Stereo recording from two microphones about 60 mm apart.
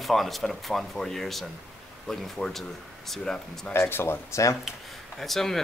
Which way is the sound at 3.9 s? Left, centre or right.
Left.